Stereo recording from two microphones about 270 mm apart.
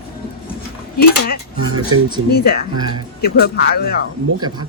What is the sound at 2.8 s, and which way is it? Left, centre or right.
Speech, centre.